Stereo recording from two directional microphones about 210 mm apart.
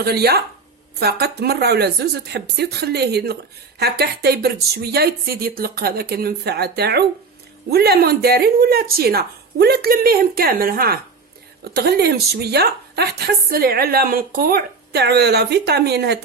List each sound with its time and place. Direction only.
0.0 s speech: 50° right (ahead or behind)